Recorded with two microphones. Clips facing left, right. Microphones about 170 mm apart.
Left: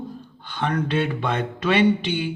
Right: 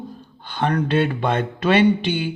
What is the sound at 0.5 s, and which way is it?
Speech, 35° right (ahead or behind).